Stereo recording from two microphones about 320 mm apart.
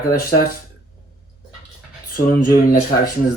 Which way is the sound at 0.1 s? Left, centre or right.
Left.